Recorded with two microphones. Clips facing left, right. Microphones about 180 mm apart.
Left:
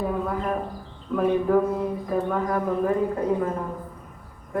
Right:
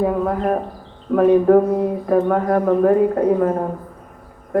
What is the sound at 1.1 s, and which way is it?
Speech, 55° right (ahead or behind).